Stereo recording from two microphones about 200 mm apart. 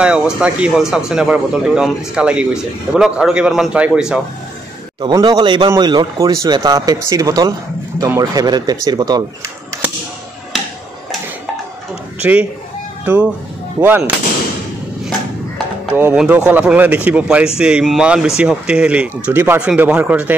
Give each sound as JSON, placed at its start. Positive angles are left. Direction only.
{"t": 0.0, "sound": "speech", "side_deg": -5}
{"t": 5.0, "sound": "a man's voice", "side_deg": -20}
{"t": 12.2, "sound": "speech", "side_deg": -5}